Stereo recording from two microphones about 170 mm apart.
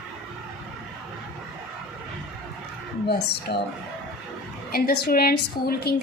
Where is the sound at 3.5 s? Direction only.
75° left (ahead or behind).